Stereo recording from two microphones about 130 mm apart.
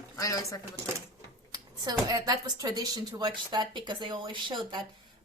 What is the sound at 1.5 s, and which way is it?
Speech, 30° right (ahead or behind).